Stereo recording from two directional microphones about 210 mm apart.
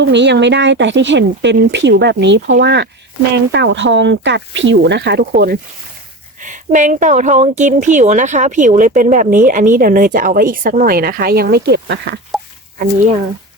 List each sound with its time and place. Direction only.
0.1 s speech: 55° right (ahead or behind)
6.4 s speech: 35° right (ahead or behind); by 12.2 s 55° right (ahead or behind)